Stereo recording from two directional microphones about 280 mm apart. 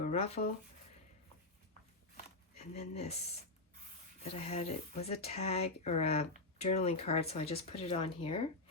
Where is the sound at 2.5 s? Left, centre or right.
Left.